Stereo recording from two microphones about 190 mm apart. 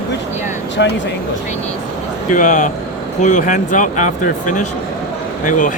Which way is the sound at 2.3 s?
40° left (ahead or behind).